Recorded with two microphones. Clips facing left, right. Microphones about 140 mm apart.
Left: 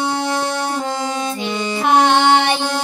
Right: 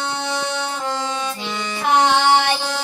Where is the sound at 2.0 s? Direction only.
20° left (ahead or behind).